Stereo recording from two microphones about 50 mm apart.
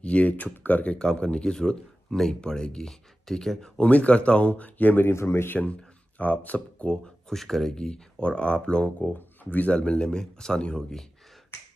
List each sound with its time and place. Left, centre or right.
0.0 s speech: left
0.9 s speech: centre
3.7 s speech: left
5.0 s speech: left
5.5 s speech: left
6.9 s speech: centre
9.0 s speech: left; by 11.0 s centre